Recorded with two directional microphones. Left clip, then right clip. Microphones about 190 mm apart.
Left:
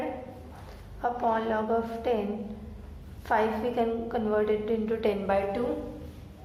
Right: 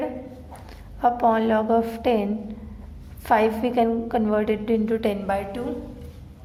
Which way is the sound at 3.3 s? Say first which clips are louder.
Right 6 dB; 25° right (ahead or behind).